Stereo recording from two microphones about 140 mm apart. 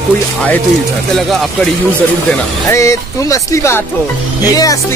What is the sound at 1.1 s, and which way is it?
Speech, centre (ahead or behind).